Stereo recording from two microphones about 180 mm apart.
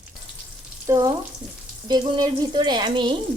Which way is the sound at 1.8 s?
20° right (ahead or behind).